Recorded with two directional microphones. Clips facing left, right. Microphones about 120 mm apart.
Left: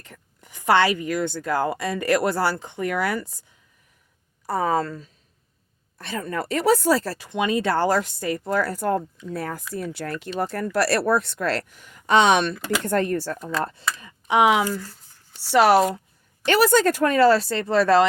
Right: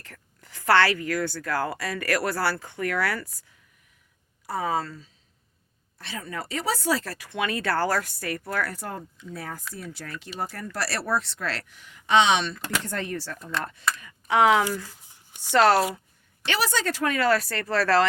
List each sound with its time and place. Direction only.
0.0 s a woman's voice: 15° left (ahead or behind)
4.4 s speech: 45° left (ahead or behind)
7.3 s a woman's voice: 20° left (ahead or behind)
8.7 s speech: 50° left (ahead or behind)
14.3 s speech: 15° left (ahead or behind)
14.8 s a sound: 15° right (ahead or behind)
15.5 s speech: 10° left (ahead or behind)
16.5 s speech: 50° left (ahead or behind); by 18.0 s 20° left (ahead or behind)